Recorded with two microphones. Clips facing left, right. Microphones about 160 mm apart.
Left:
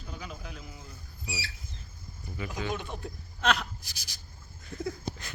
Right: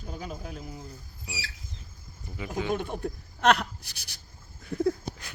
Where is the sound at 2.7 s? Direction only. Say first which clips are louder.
Right 6 dB; 50° right (ahead or behind).